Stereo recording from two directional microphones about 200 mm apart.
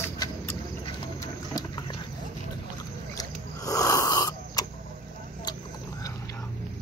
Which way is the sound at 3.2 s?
15° left (ahead or behind).